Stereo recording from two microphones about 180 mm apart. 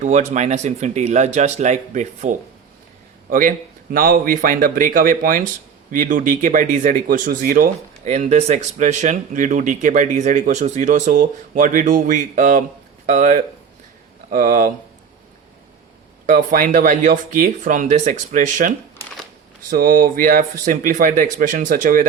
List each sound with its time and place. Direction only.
0.0 s a man's voice: 40° right (ahead or behind)
16.2 s speech: 45° right (ahead or behind)
19.7 s speech: 50° right (ahead or behind)